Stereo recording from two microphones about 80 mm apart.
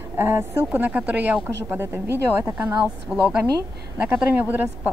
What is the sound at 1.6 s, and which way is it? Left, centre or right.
Speech, right.